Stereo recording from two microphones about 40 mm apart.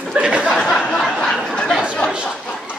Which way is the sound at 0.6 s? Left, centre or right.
Centre.